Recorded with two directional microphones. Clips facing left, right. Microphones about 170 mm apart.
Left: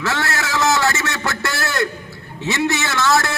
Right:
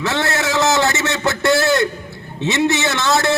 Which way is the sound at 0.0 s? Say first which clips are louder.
Right 3 dB; 20° right (ahead or behind).